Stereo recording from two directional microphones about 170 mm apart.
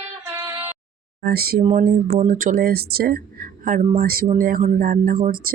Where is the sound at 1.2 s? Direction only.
65° right (ahead or behind).